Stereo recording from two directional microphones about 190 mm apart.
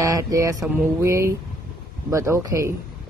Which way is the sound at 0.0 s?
20° right (ahead or behind).